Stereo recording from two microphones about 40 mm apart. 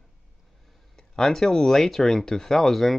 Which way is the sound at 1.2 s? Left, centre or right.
Centre.